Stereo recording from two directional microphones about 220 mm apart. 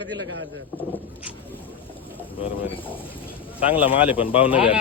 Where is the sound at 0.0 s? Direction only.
55° right (ahead or behind).